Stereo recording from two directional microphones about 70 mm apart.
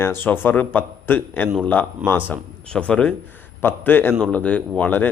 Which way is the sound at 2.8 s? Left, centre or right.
Centre.